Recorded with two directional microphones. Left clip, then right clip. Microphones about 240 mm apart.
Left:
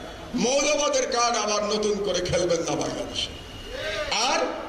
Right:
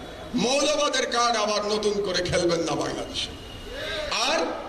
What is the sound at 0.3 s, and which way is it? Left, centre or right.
A man's voice, right.